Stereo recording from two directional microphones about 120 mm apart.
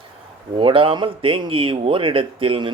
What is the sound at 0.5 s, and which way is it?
Speech, 45° right (ahead or behind).